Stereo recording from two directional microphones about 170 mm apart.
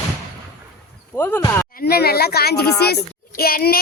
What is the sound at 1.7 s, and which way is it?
A child's voice, 60° left (ahead or behind).